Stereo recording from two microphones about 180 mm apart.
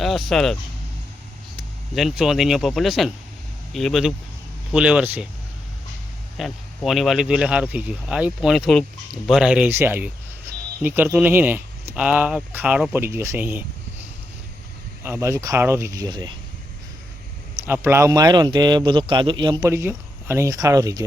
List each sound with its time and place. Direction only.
0.0 s speech: centre (ahead or behind)
2.0 s speech: centre (ahead or behind)
6.3 s speech: centre (ahead or behind)
15.0 s speech: 15° right (ahead or behind)
17.7 s speech: 15° right (ahead or behind)